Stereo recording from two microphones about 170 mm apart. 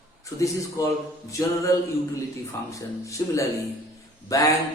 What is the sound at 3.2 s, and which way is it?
A man's voice, 20° left (ahead or behind).